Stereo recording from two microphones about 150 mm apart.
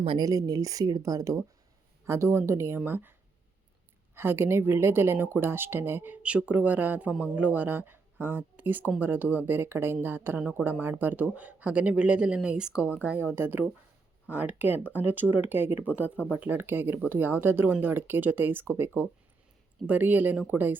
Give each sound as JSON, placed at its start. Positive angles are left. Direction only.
{"t": 0.2, "sound": "a woman's voice", "side_deg": -25}